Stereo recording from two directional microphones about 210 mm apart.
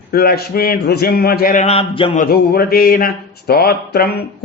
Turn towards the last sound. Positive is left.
turn(degrees=45)  # may be behind; listen again after turning